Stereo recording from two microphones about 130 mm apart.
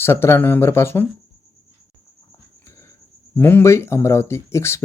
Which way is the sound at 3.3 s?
15° left (ahead or behind).